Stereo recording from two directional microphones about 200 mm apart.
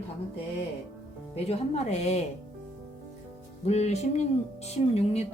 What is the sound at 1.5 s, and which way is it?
Speech, 30° left (ahead or behind).